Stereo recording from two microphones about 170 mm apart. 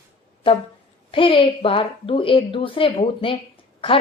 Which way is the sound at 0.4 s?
30° left (ahead or behind).